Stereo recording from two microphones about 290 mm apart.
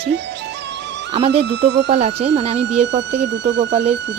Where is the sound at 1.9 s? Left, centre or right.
Right.